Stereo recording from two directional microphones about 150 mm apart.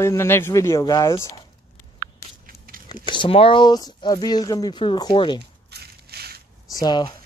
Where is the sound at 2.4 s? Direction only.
75° right (ahead or behind).